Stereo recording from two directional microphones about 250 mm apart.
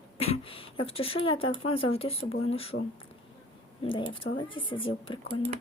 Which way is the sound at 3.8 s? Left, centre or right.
Centre.